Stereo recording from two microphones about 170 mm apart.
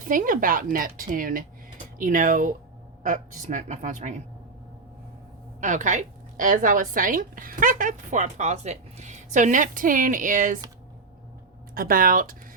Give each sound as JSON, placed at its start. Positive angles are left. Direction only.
{"t": 0.0, "sound": "a woman's voice", "side_deg": -55}
{"t": 5.5, "sound": "a woman's voice", "side_deg": -45}
{"t": 11.7, "sound": "speech", "side_deg": -60}